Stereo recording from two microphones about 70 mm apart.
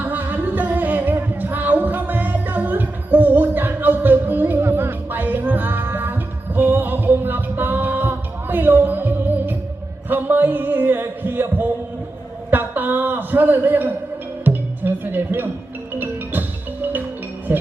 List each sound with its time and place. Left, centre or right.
0.0 s music: right
10.1 s heart sounds: right
12.5 s a sound: right
14.4 s music: right